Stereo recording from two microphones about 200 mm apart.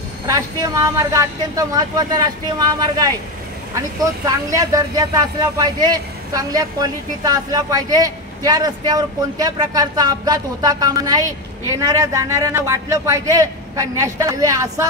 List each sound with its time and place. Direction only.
0.3 s a man's voice: 15° right (ahead or behind)
4.5 s a man's voice: 15° right (ahead or behind)